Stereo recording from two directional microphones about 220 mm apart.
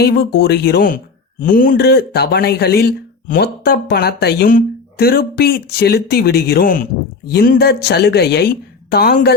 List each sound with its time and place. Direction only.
0.0 s speech: 45° left (ahead or behind)